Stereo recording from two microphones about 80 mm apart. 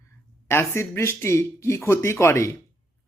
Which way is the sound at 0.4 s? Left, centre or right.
Left.